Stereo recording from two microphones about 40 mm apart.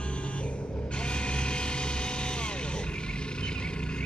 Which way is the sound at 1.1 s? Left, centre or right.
Left.